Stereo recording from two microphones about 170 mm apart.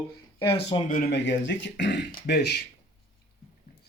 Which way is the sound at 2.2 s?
75° left (ahead or behind).